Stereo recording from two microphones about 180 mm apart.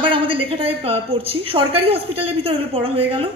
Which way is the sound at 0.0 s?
30° right (ahead or behind).